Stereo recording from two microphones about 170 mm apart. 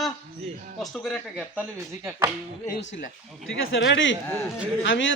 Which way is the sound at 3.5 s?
90° left.